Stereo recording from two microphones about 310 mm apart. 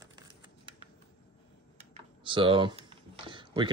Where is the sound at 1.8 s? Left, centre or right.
Centre.